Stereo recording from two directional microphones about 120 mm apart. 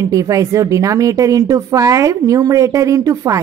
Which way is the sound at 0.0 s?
30° right (ahead or behind).